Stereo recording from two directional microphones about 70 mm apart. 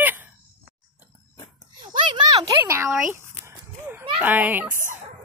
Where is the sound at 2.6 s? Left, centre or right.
Right.